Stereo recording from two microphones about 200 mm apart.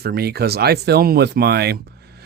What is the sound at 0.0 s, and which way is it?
Speech, 50° right (ahead or behind).